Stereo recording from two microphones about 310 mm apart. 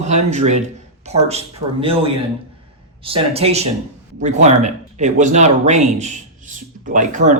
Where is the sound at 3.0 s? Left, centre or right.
Centre.